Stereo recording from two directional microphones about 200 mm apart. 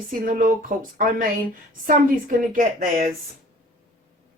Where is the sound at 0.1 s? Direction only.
45° right (ahead or behind).